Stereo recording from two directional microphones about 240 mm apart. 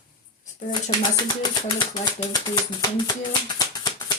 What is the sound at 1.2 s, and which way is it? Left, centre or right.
Music, centre.